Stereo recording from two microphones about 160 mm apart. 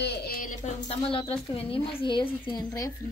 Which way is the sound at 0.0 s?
85° left.